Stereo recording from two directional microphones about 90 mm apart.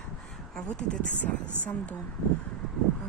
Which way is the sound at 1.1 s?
25° right (ahead or behind).